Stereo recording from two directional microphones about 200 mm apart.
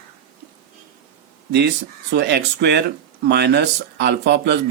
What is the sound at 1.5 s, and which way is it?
Speech, 55° right (ahead or behind).